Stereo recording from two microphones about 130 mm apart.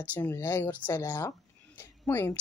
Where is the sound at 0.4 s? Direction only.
15° left (ahead or behind).